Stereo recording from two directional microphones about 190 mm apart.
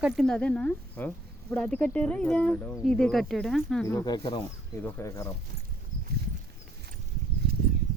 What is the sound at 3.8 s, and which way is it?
Speech, 20° left (ahead or behind).